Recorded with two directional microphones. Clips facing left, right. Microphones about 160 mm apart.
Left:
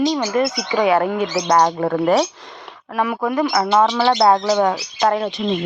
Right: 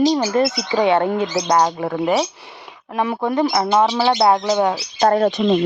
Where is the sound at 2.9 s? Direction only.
25° right (ahead or behind).